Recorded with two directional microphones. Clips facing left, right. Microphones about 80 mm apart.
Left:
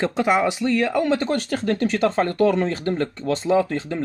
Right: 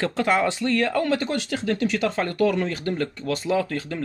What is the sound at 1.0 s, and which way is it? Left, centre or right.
Speech, left.